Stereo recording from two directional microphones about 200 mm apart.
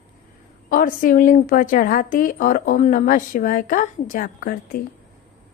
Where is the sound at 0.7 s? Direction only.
45° left (ahead or behind).